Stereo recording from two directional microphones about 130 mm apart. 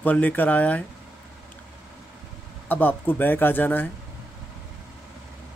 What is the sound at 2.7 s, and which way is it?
Speech, 15° left (ahead or behind).